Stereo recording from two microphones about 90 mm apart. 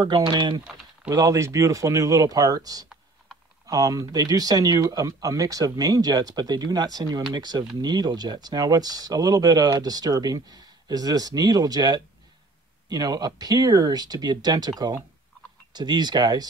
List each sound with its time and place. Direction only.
0.0 s speech: 55° right (ahead or behind)
1.1 s speech: 40° right (ahead or behind)